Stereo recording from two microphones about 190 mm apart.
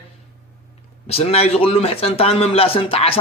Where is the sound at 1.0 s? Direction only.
30° left (ahead or behind).